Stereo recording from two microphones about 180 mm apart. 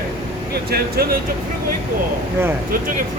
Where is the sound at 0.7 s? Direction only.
60° right (ahead or behind).